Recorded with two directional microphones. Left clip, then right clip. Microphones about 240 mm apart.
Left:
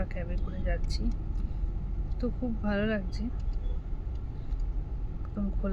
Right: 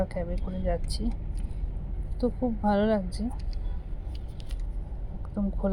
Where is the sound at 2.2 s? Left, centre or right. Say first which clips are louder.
Right 7 dB; centre.